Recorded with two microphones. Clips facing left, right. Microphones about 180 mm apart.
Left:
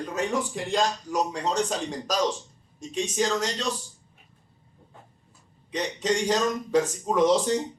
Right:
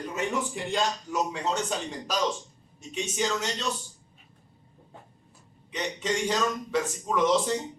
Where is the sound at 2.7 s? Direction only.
35° left (ahead or behind).